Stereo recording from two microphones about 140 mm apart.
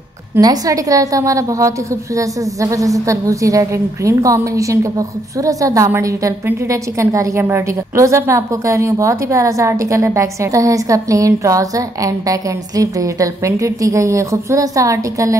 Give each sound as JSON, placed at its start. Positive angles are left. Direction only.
{"t": 0.4, "sound": "a woman's voice", "side_deg": -25}